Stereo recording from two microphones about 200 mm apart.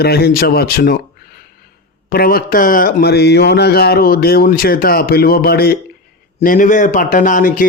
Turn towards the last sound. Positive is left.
turn(degrees=45)  # may be behind; listen again after turning